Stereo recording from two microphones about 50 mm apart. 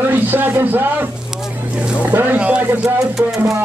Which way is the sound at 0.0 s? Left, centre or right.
Right.